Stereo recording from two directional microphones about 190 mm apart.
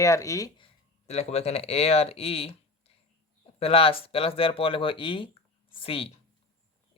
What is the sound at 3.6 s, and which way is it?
Speech, 30° left (ahead or behind).